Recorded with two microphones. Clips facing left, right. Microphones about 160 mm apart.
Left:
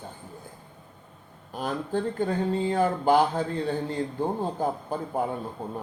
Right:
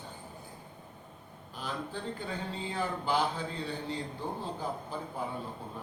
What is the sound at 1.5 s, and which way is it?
Speech, 50° left (ahead or behind).